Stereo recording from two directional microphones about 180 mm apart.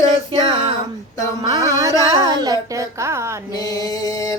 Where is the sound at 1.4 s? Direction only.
20° right (ahead or behind).